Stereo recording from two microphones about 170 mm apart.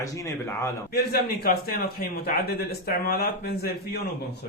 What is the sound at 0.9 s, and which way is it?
A man's voice, 65° left (ahead or behind).